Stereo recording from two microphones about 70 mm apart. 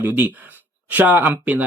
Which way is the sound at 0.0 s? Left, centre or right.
Right.